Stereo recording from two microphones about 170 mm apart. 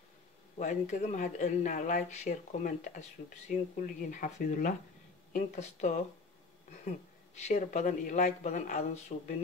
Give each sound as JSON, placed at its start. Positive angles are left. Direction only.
{"t": 0.6, "sound": "speech", "side_deg": 45}
{"t": 7.4, "sound": "speech", "side_deg": 45}